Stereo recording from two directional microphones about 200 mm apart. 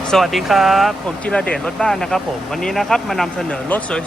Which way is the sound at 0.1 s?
Centre (ahead or behind).